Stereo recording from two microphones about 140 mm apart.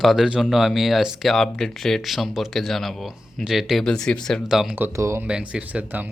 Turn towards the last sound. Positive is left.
turn(degrees=-10)  # may be behind; listen again after turning